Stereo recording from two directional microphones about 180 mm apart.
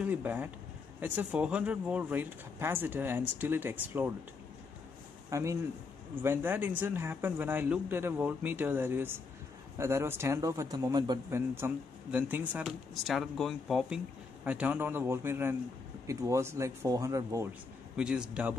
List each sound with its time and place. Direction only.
0.0 s speech: 10° right (ahead or behind)
5.3 s speech: 15° right (ahead or behind)
17.9 s speech: 5° right (ahead or behind)